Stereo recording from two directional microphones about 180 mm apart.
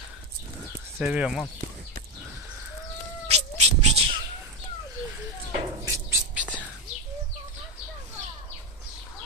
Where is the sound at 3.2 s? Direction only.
35° right (ahead or behind).